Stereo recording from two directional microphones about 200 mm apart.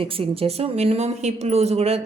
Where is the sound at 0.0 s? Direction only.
25° right (ahead or behind).